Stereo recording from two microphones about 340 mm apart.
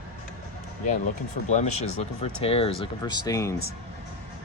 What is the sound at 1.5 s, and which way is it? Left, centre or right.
Speech, left.